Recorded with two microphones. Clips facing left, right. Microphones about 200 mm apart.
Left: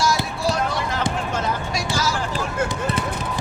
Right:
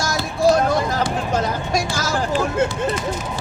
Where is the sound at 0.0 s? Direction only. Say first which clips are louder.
Right 4 dB; 45° right (ahead or behind).